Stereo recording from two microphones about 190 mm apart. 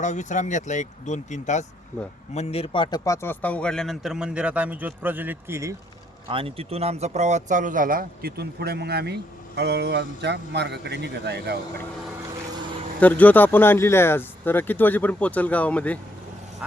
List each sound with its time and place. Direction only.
0.0 s speech: 40° left (ahead or behind); by 5.7 s 15° right (ahead or behind)
6.2 s speech: 30° right (ahead or behind); by 11.5 s 60° right (ahead or behind)
13.0 s speech: 10° left (ahead or behind)